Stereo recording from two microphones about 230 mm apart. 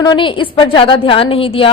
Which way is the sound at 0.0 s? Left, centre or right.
Centre.